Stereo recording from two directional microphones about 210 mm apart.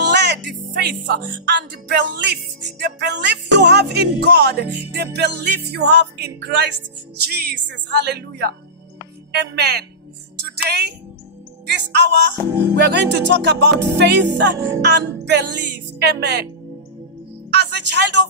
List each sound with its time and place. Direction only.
0.1 s speech: 50° right (ahead or behind)
9.6 s speech: 50° right (ahead or behind)
10.4 s music: 50° right (ahead or behind)
11.6 s speech: 55° right (ahead or behind)
17.5 s music: 55° right (ahead or behind)